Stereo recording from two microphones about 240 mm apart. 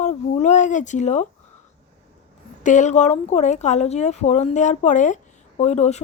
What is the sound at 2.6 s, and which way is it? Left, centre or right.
Speech, left.